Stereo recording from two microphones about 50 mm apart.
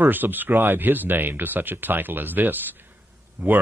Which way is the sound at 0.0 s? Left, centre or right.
Right.